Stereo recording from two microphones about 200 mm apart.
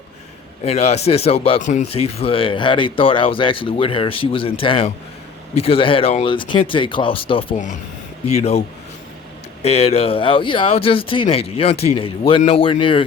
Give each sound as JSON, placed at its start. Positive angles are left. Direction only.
{"t": 0.6, "sound": "speech", "side_deg": 30}
{"t": 9.6, "sound": "speech", "side_deg": 30}